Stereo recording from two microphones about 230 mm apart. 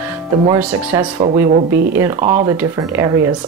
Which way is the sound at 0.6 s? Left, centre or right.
Centre.